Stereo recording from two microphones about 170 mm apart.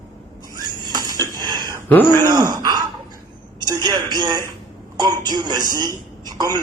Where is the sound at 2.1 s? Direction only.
20° right (ahead or behind).